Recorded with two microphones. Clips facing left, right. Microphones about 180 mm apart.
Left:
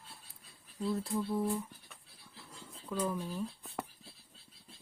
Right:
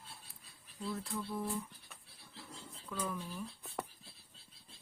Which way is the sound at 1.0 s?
35° left (ahead or behind).